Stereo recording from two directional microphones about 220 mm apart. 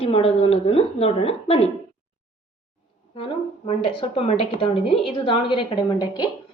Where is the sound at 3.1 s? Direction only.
25° left (ahead or behind).